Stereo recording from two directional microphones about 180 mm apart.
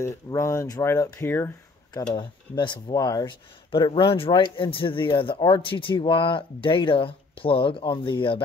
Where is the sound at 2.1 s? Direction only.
25° left (ahead or behind).